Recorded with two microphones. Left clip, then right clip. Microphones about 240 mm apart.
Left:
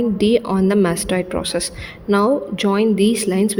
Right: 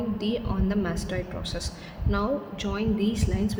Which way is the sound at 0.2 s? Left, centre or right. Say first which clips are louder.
Left 14 dB; left.